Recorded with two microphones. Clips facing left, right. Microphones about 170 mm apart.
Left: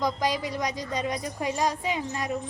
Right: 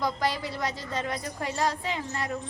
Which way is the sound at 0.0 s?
15° left (ahead or behind).